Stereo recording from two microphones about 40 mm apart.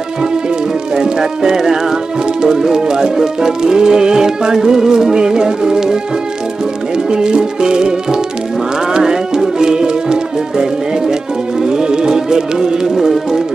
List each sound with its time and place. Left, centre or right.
0.9 s speech: centre
7.1 s music: right
11.6 s music: centre